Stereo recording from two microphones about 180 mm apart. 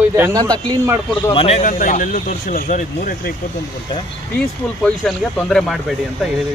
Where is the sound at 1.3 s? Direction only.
35° left (ahead or behind).